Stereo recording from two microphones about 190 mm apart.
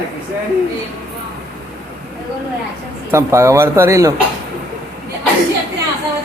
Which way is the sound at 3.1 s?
15° right (ahead or behind).